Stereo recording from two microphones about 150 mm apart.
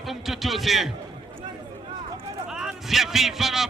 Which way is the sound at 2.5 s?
5° right (ahead or behind).